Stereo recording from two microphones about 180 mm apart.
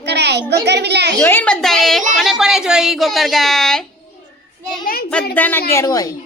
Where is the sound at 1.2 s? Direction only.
10° left (ahead or behind).